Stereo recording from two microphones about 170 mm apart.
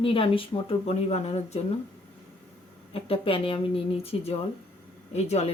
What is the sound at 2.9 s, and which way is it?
Speech, 35° left (ahead or behind).